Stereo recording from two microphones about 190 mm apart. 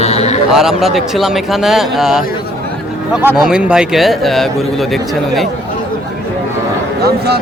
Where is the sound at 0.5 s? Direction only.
Centre (ahead or behind).